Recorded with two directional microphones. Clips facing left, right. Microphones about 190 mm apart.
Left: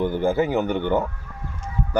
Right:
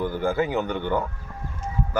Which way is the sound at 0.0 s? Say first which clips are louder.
Left 3 dB; 20° left (ahead or behind).